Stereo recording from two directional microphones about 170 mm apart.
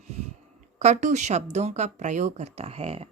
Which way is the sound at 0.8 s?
45° right (ahead or behind).